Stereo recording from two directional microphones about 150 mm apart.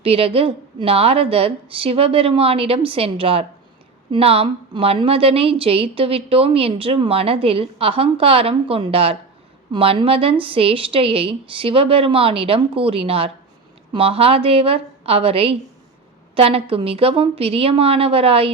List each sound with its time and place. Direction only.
0.0 s a woman's voice: 40° right (ahead or behind)